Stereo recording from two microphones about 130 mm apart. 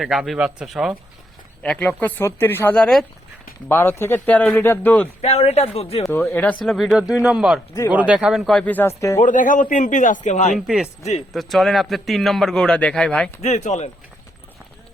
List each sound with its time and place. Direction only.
0.0 s a man's voice: centre (ahead or behind)
1.6 s speech: 10° left (ahead or behind)
3.7 s speech: 15° left (ahead or behind)
5.2 s speech: 50° left (ahead or behind)
6.1 s a man's voice: 15° left (ahead or behind)
8.7 s speech: 20° left (ahead or behind)
9.2 s a man's voice: 85° left; by 10.5 s 65° left (ahead or behind)
10.5 s a man's voice: 5° right (ahead or behind)
13.4 s speech: 60° left (ahead or behind)